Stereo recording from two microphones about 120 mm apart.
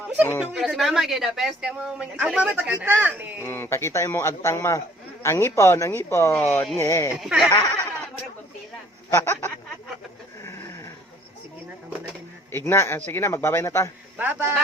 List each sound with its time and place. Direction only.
0.3 s speech: 20° left (ahead or behind)
0.5 s speech: centre (ahead or behind)
3.4 s speech: 20° left (ahead or behind)
7.2 s speech: centre (ahead or behind)
7.5 s a sound: 25° left (ahead or behind)
9.0 s speech: 20° left (ahead or behind)
10.4 s a sound: 25° left (ahead or behind)
12.5 s speech: 20° left (ahead or behind)
14.2 s speech: 15° right (ahead or behind)